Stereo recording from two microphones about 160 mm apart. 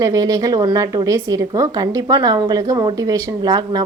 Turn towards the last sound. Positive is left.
turn(degrees=-25)  # may be behind; listen again after turning